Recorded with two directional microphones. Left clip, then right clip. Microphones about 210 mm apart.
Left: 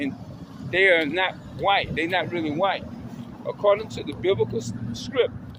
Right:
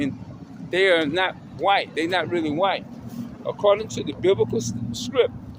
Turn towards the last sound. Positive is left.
turn(degrees=-30)  # may be behind; listen again after turning